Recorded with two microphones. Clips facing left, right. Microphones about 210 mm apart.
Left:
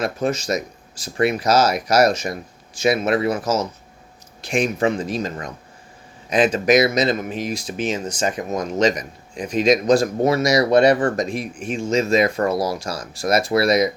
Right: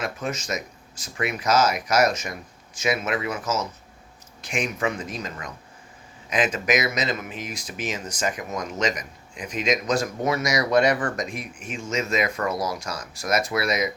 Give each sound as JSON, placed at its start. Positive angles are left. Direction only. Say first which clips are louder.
{"t": 0.0, "sound": "speech", "louder": "left 7 dB", "side_deg": 35}